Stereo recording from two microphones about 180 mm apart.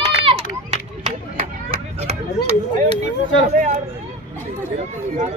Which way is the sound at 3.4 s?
45° right (ahead or behind).